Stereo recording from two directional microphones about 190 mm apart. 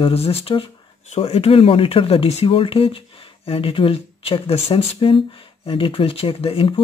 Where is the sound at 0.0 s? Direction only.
30° left (ahead or behind).